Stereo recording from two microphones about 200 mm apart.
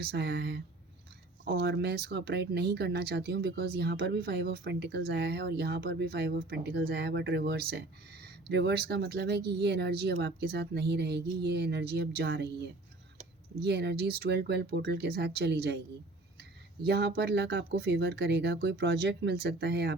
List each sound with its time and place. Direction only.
0.0 s speech: 55° right (ahead or behind)
13.6 s speech: 55° right (ahead or behind)